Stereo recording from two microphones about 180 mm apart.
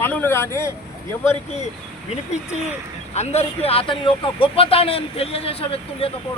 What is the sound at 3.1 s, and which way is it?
Speech, 35° left (ahead or behind).